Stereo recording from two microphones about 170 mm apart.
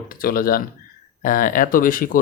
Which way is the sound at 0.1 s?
60° left (ahead or behind).